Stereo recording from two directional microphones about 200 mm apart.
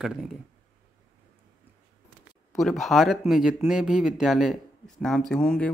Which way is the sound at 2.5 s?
Centre (ahead or behind).